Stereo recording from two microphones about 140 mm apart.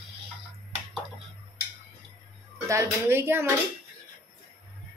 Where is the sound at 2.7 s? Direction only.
20° right (ahead or behind).